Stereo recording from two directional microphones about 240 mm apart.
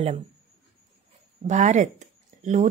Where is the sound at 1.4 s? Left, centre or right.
Right.